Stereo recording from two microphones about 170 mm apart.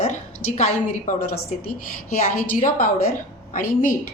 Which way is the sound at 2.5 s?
55° left (ahead or behind).